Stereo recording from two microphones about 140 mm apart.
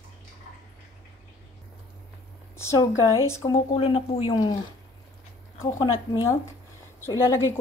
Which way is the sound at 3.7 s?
40° left (ahead or behind).